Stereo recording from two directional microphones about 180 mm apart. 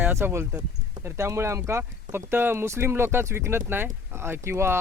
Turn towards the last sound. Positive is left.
turn(degrees=-15)  # may be behind; listen again after turning